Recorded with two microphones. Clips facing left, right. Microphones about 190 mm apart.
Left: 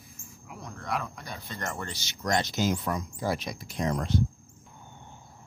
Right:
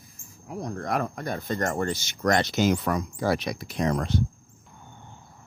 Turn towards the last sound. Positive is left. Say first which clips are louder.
# right 3 dB
turn(degrees=-70)  # may be behind; listen again after turning